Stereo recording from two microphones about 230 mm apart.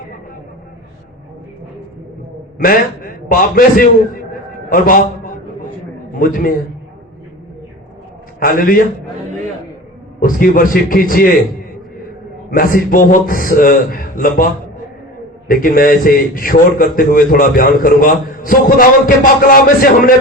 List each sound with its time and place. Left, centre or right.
2.6 s a man's voice: left
8.4 s a man's voice: left
10.2 s a man's voice: left
12.5 s a man's voice: left